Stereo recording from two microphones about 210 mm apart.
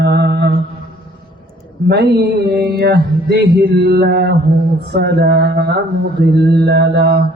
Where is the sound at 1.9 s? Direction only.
50° right (ahead or behind).